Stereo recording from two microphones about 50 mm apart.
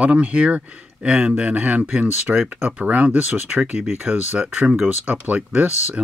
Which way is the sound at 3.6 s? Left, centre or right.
Right.